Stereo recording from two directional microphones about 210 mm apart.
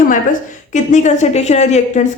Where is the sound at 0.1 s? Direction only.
35° left (ahead or behind).